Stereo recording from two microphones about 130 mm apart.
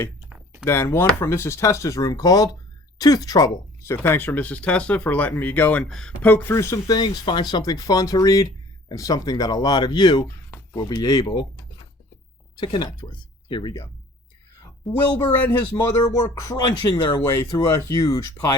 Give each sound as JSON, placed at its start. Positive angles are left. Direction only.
{"t": 0.3, "sound": "a sound", "side_deg": -10}
{"t": 0.6, "sound": "speech", "side_deg": 20}
{"t": 12.5, "sound": "speech", "side_deg": 35}
{"t": 14.8, "sound": "speech", "side_deg": 0}
{"t": 15.7, "sound": "speech", "side_deg": 20}